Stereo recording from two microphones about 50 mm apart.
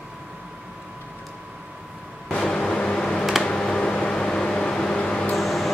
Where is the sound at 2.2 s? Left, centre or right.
Left.